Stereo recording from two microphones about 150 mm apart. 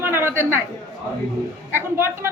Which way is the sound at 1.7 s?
15° right (ahead or behind).